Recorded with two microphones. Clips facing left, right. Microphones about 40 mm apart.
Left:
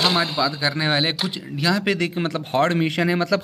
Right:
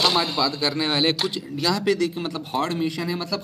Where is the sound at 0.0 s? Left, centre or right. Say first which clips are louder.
Left 1 dB; centre.